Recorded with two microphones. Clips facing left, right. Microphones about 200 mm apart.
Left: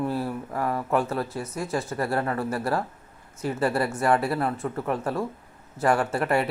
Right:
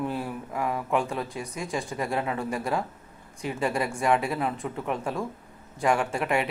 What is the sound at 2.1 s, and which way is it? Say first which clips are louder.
Speech: left 2 dB; 10° right (ahead or behind).